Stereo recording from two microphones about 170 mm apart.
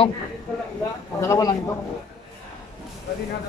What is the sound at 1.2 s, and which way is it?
Speech, 20° left (ahead or behind).